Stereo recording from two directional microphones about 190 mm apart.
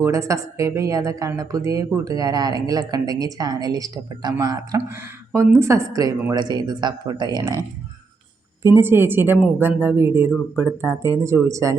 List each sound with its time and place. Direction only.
0.0 s speech: 15° right (ahead or behind)
8.6 s speech: 15° right (ahead or behind)